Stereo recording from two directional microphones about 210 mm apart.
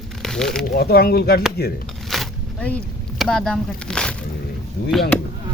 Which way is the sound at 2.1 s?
5° left (ahead or behind).